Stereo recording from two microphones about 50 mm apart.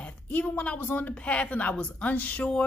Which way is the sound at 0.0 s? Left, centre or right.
Left.